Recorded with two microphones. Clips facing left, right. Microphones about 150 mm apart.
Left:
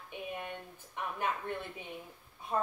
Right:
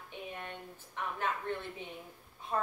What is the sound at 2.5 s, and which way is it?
Speech, 20° left (ahead or behind).